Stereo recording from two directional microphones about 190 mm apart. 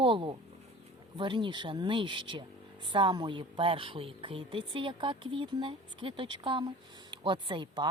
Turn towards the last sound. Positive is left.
turn(degrees=-25)  # may be behind; listen again after turning